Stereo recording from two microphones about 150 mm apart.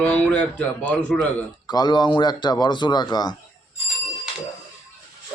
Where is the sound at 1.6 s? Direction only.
30° left (ahead or behind).